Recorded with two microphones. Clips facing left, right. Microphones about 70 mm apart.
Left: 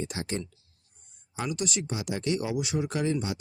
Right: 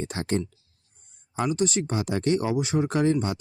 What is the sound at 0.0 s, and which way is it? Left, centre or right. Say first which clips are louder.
Speech: right 5 dB; right.